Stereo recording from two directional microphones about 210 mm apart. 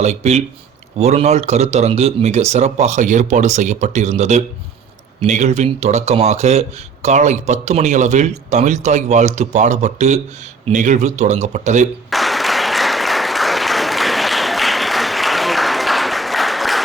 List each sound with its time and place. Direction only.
0.0 s speech: 30° right (ahead or behind)
12.1 s applause: centre (ahead or behind)